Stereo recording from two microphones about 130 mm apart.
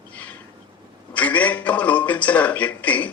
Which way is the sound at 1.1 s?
10° left (ahead or behind).